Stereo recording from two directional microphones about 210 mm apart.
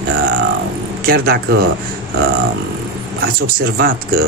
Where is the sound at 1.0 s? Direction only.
45° right (ahead or behind).